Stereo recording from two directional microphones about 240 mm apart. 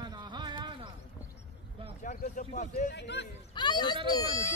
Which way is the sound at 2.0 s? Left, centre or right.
Left.